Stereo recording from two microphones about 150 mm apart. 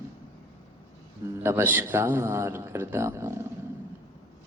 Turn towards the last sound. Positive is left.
turn(degrees=-15)  # may be behind; listen again after turning